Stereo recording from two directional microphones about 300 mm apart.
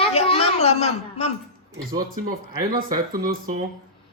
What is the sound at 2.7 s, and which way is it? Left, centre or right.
Speech, right.